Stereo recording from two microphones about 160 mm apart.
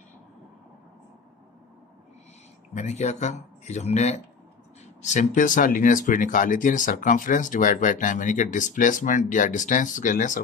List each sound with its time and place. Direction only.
2.7 s speech: 45° left (ahead or behind)